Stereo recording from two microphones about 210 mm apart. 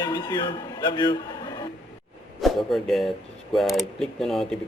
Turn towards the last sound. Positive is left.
turn(degrees=0)  # may be behind; listen again after turning